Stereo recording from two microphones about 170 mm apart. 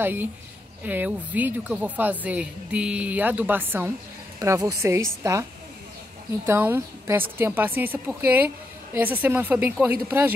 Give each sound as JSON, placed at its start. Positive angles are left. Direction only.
{"t": 0.0, "sound": "a woman's voice", "side_deg": -10}